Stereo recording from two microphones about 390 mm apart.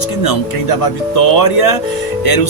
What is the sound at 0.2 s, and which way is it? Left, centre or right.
Speech, left.